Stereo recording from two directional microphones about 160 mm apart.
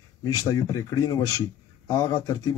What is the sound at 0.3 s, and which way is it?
A man's voice, 25° left (ahead or behind).